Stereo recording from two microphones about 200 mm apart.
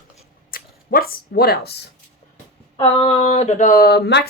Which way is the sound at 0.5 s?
45° left (ahead or behind).